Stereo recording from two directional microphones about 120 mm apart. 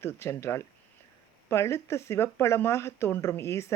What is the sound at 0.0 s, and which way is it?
Speech, 20° left (ahead or behind).